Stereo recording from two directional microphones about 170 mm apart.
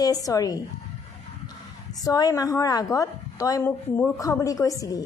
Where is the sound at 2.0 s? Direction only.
20° left (ahead or behind).